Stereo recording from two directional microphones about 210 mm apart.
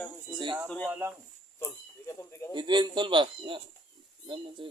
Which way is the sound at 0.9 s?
10° right (ahead or behind).